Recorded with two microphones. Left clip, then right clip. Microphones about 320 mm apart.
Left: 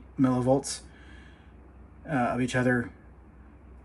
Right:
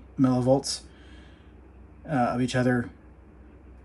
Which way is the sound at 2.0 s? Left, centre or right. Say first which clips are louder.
Right 2 dB; centre.